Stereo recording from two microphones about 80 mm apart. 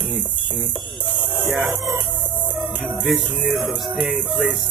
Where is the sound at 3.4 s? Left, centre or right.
Centre.